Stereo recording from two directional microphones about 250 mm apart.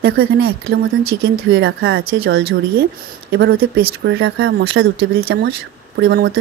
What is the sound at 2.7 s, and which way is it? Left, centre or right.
Speech, right.